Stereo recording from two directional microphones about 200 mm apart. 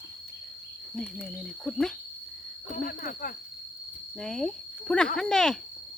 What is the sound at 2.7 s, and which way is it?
Speech, 40° left (ahead or behind).